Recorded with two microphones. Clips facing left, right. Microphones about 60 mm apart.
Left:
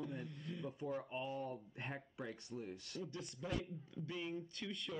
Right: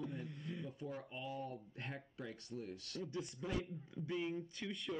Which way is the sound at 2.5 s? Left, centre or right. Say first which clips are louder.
Right 2 dB; centre.